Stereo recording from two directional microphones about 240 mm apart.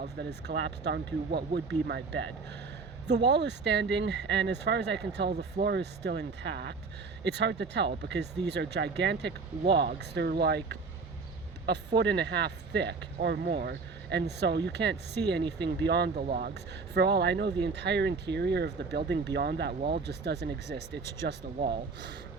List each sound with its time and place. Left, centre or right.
0.0 s speech: right
11.9 s speech: right